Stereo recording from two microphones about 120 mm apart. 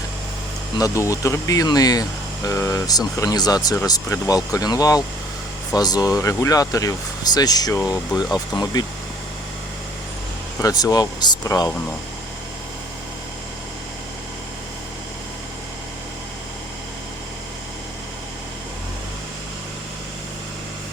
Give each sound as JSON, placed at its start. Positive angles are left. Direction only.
{"t": 0.8, "sound": "speech", "side_deg": 25}
{"t": 10.6, "sound": "speech", "side_deg": 30}